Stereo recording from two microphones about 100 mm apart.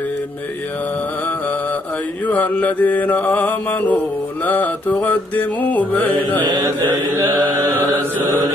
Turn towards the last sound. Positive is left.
turn(degrees=-20)  # may be behind; listen again after turning